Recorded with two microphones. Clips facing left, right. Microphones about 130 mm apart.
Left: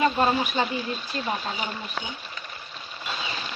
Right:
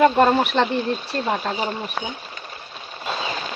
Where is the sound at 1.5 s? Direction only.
35° right (ahead or behind).